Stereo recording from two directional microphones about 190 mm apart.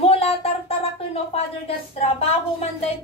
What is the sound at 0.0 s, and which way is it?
Music, 30° left (ahead or behind).